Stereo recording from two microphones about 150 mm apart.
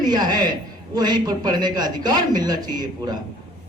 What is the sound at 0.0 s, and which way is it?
A man's voice, 25° right (ahead or behind).